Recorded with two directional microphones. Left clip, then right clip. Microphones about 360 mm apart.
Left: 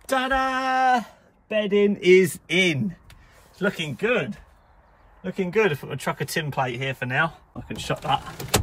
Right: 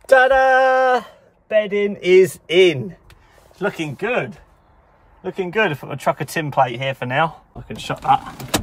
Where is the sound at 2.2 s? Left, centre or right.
Right.